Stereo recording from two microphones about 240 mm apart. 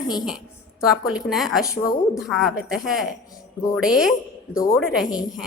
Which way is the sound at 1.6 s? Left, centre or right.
Centre.